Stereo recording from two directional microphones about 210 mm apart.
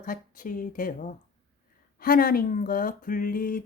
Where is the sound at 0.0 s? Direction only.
40° left (ahead or behind).